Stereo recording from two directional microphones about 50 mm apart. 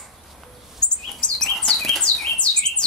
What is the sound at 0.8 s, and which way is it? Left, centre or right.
Chirp, centre.